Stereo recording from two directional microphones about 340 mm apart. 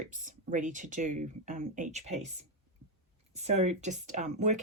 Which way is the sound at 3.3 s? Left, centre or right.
Centre.